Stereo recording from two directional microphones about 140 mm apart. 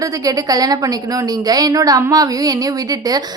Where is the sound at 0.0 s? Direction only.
25° right (ahead or behind).